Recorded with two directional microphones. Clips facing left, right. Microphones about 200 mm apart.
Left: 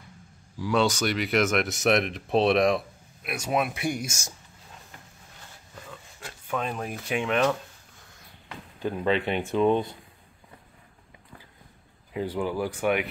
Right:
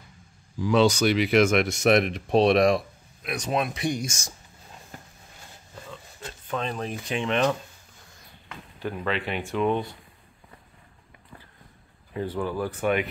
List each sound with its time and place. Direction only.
0.6 s speech: centre (ahead or behind)
6.4 s speech: 10° left (ahead or behind)
8.8 s speech: 20° left (ahead or behind)
12.1 s speech: 15° left (ahead or behind)